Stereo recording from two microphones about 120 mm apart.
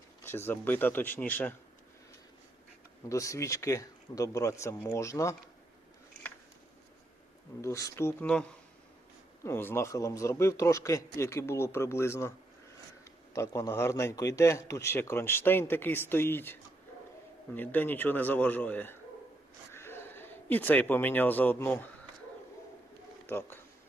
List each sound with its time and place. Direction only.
0.3 s a man's voice: 20° left (ahead or behind)
3.1 s a man's voice: 25° left (ahead or behind)
7.6 s a man's voice: 25° left (ahead or behind)
9.4 s a man's voice: 20° left (ahead or behind)
13.3 s a man's voice: 25° left (ahead or behind)
23.2 s speech: 20° left (ahead or behind)